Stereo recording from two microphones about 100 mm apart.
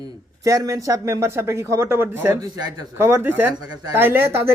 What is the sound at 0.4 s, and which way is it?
A woman's voice, 35° right (ahead or behind).